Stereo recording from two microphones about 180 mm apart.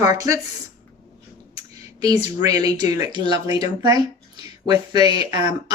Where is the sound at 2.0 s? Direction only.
20° right (ahead or behind).